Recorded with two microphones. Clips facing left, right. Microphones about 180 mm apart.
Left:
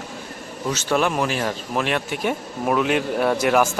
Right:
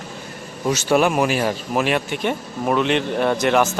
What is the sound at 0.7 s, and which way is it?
Speech, 10° right (ahead or behind).